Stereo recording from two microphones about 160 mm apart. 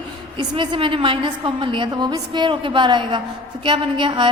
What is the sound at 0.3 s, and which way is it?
A woman's voice, 30° right (ahead or behind).